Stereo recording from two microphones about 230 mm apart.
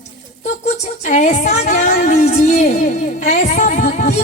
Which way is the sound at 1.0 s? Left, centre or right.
Left.